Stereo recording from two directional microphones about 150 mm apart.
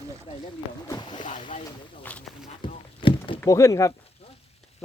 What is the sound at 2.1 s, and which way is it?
Speech, 10° left (ahead or behind).